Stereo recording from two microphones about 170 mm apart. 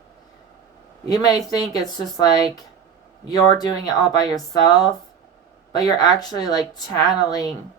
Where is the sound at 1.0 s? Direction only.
20° left (ahead or behind).